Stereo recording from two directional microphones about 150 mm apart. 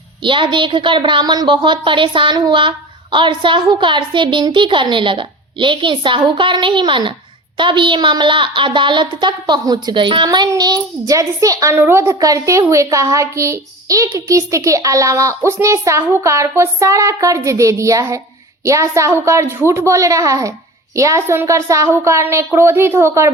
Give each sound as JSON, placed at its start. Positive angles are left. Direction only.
{"t": 0.2, "sound": "a woman's voice", "side_deg": -35}